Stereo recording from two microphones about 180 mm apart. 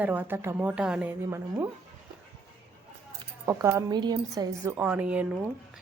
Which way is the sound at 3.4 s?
15° right (ahead or behind).